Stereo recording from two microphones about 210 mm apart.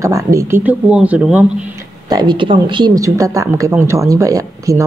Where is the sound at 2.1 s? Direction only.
20° right (ahead or behind).